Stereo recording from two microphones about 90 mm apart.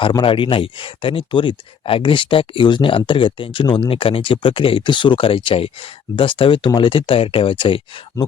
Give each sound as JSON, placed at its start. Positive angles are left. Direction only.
{"t": 0.3, "sound": "speech", "side_deg": 70}